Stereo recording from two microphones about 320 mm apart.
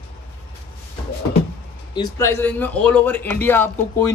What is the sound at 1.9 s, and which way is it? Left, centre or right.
A man's voice, centre.